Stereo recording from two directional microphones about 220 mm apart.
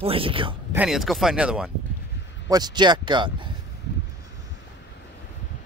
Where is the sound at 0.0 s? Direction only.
25° right (ahead or behind).